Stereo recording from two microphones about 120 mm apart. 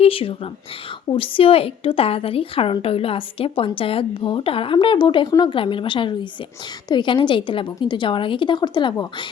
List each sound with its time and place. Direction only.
0.0 s a woman's voice: 50° left (ahead or behind)